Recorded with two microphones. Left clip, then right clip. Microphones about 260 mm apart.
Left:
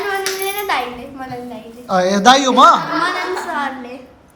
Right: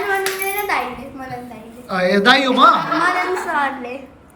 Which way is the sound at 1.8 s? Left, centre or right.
Centre.